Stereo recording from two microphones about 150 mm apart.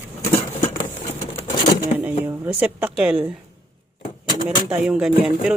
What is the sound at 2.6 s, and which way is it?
Speech, 10° right (ahead or behind).